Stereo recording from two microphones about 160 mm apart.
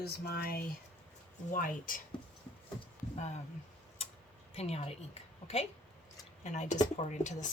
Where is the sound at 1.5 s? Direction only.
60° left (ahead or behind).